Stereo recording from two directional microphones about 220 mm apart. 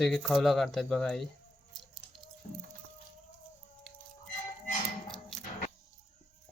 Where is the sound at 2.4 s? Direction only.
35° left (ahead or behind).